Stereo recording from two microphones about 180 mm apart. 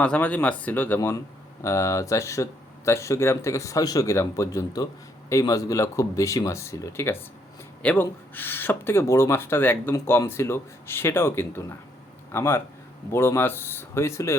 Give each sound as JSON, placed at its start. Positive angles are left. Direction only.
{"t": 0.0, "sound": "speech", "side_deg": 10}